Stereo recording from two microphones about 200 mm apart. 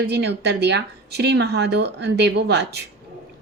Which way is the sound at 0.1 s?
55° right (ahead or behind).